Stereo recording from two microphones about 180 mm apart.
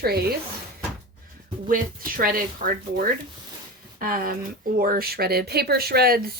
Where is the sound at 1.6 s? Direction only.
50° right (ahead or behind).